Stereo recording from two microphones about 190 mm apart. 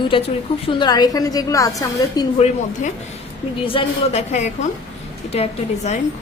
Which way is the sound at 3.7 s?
35° left (ahead or behind).